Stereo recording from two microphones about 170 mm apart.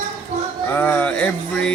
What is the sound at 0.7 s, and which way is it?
Speech, 10° left (ahead or behind).